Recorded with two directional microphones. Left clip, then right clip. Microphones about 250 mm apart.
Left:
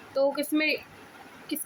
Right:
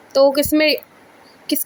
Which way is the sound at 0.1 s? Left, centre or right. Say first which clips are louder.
Right 12 dB; right.